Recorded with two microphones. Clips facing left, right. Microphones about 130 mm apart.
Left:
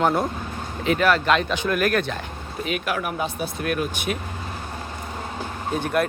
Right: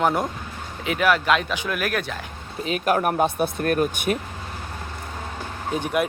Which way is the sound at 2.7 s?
40° right (ahead or behind).